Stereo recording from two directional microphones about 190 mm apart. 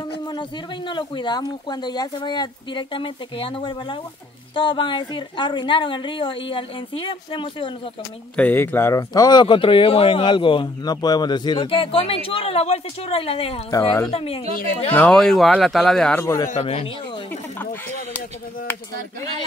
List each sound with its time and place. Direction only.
0.3 s speech: 25° left (ahead or behind)
8.4 s speech: 10° left (ahead or behind); by 13.6 s 30° left (ahead or behind)
13.7 s a woman's voice: 15° left (ahead or behind)
14.1 s speech: 30° left (ahead or behind)
15.0 s a man's voice: 5° left (ahead or behind)